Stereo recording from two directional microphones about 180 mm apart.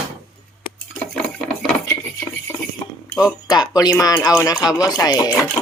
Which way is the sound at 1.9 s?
15° left (ahead or behind).